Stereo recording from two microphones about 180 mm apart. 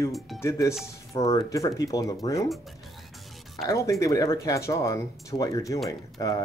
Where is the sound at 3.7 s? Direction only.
20° left (ahead or behind).